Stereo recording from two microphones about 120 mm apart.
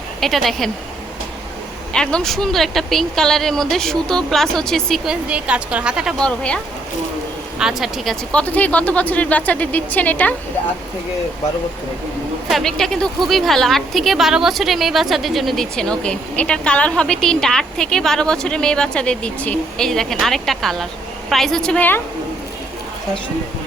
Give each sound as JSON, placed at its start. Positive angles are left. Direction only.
{"t": 0.2, "sound": "a woman's voice", "side_deg": 0}
{"t": 1.9, "sound": "a woman's voice", "side_deg": 5}
{"t": 5.3, "sound": "speech", "side_deg": -10}
{"t": 6.1, "sound": "speech", "side_deg": 10}
{"t": 7.6, "sound": "a woman's voice", "side_deg": -5}
{"t": 8.3, "sound": "speech", "side_deg": 10}
{"t": 12.5, "sound": "a woman's voice", "side_deg": 5}